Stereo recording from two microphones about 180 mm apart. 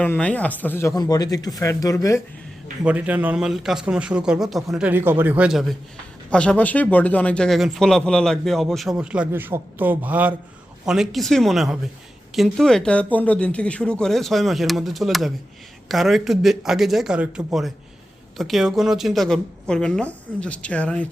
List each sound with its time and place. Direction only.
0.0 s speech: 5° left (ahead or behind)
2.8 s speech: 5° right (ahead or behind)